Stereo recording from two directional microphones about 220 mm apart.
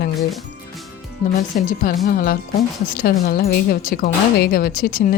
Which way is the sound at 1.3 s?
40° left (ahead or behind).